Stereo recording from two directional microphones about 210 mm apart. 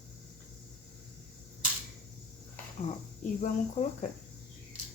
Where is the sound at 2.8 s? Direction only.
35° left (ahead or behind).